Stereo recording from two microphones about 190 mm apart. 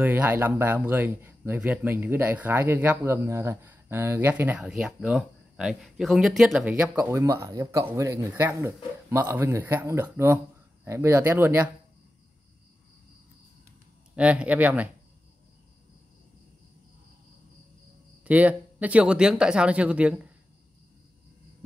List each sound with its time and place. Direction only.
0.0 s speech: 10° right (ahead or behind)
14.1 s speech: 5° right (ahead or behind)
18.2 s speech: 10° right (ahead or behind)